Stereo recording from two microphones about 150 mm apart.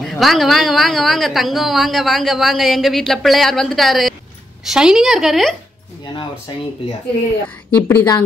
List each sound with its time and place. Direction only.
0.0 s a woman's voice: centre (ahead or behind)
6.5 s speech: 30° left (ahead or behind)
7.4 s a woman's voice: 10° left (ahead or behind)